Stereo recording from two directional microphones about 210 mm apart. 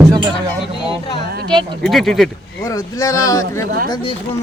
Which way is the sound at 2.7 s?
15° left (ahead or behind).